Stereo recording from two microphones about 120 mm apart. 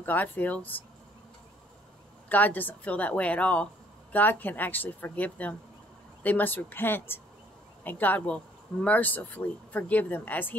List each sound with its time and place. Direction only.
0.0 s speech: 15° left (ahead or behind)
2.2 s speech: 15° left (ahead or behind)